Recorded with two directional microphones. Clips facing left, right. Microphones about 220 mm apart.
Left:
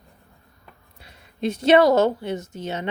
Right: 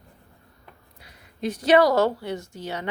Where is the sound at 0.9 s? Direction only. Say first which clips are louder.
Left 4 dB; 25° left (ahead or behind).